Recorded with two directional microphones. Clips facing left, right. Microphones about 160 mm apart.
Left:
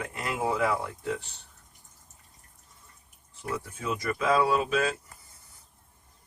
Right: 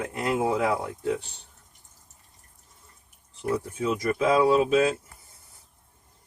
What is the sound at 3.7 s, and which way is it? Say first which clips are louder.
Speech: right 3 dB; 30° right (ahead or behind).